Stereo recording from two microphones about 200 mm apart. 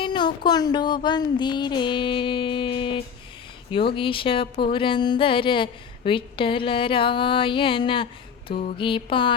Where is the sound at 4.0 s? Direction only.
25° left (ahead or behind).